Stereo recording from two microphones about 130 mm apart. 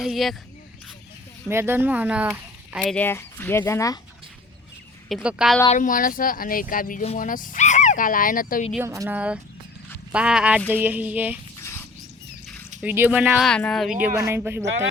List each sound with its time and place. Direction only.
0.0 s speech: centre (ahead or behind)
1.5 s speech: 20° right (ahead or behind)
2.8 s speech: 10° left (ahead or behind)
5.0 s speech: centre (ahead or behind)
5.7 s speech: 90° left
8.8 s speech: 25° right (ahead or behind)
9.0 s speech: 10° right (ahead or behind)
11.6 s rodents: 20° left (ahead or behind)
12.8 s speech: 10° right (ahead or behind)
13.5 s speech: 5° left (ahead or behind)
14.2 s speech: 20° right (ahead or behind)